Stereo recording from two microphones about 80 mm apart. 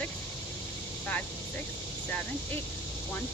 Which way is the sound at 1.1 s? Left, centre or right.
Centre.